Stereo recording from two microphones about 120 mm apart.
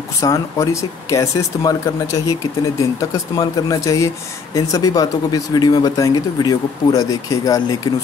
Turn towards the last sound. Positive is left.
turn(degrees=30)  # may be behind; listen again after turning